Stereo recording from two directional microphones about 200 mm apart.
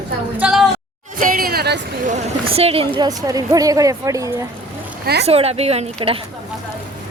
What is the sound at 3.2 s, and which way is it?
A woman's voice, 15° right (ahead or behind).